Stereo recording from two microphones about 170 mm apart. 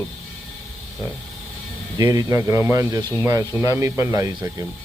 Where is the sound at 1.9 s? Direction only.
20° right (ahead or behind).